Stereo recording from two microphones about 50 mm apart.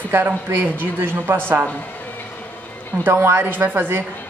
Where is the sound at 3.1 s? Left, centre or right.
Right.